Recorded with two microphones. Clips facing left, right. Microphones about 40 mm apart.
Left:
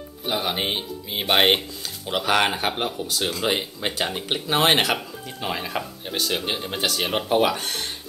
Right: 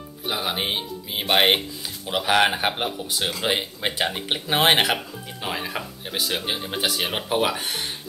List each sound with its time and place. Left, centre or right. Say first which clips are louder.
0.2 s speech: left 1 dB; centre